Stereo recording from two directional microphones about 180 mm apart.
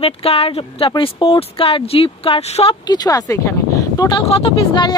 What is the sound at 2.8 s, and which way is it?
Speech, 20° left (ahead or behind).